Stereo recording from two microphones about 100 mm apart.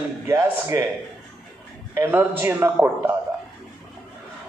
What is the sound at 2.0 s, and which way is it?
A man's voice, 20° right (ahead or behind).